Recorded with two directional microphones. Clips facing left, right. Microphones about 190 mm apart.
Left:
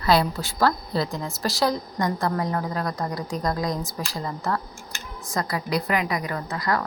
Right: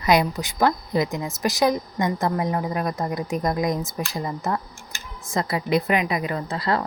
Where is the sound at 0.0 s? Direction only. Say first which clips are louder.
Right 1 dB; 20° right (ahead or behind).